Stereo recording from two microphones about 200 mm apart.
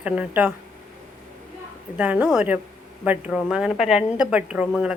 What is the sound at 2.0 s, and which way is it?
A woman's voice, 10° right (ahead or behind).